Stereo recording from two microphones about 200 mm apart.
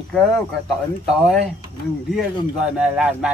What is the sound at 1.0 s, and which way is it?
A man's voice, centre (ahead or behind).